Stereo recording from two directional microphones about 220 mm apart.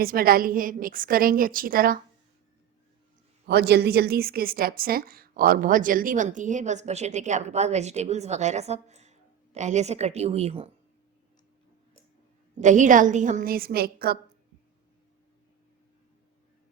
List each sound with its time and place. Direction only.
0.0 s a woman's voice: 40° right (ahead or behind)
3.4 s a woman's voice: 45° right (ahead or behind); by 10.7 s 25° right (ahead or behind)
12.5 s a woman's voice: 35° right (ahead or behind)